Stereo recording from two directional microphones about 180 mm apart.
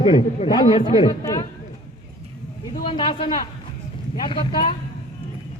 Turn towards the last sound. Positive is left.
turn(degrees=25)  # may be behind; listen again after turning